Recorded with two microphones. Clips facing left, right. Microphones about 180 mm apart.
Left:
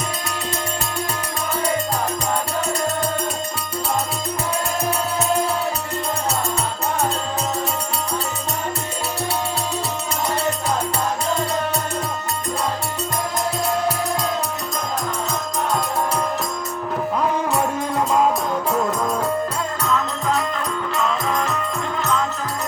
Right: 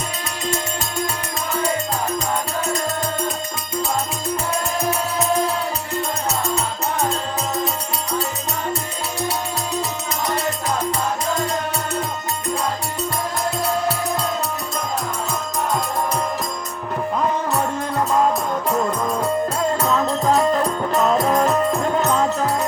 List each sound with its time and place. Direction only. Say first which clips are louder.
17.2 s music: even; 5° left (ahead or behind)
19.8 s music: even; 35° right (ahead or behind)